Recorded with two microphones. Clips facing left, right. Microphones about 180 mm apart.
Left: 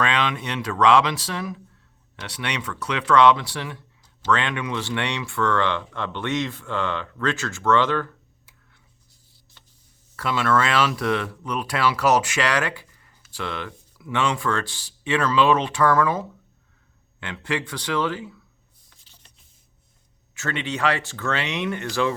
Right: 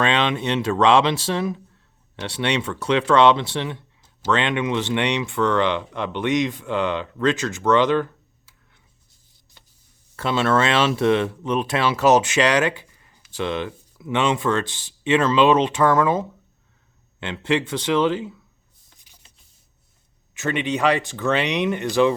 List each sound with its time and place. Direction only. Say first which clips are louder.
0.0 s speech: right 3 dB; 25° right (ahead or behind)
10.2 s speech: right 2 dB; 25° right (ahead or behind)
18.9 s a sound: right 1 dB; 15° right (ahead or behind)
20.3 s speech: right 5 dB; 15° right (ahead or behind)